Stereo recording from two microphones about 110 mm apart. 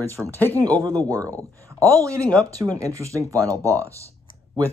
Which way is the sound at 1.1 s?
30° right (ahead or behind).